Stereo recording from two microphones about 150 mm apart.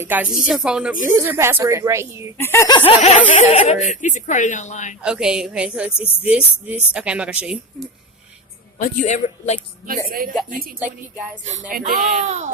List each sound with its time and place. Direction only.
0.0 s a woman's voice: 10° right (ahead or behind)
1.1 s a woman's voice: 15° right (ahead or behind)
2.4 s speech: 20° left (ahead or behind)
2.7 s speech: 40° left (ahead or behind)
5.0 s a woman's voice: 5° right (ahead or behind)
8.8 s a man's voice: 55° left (ahead or behind)
10.1 s speech: 70° right (ahead or behind); by 12.5 s 50° right (ahead or behind)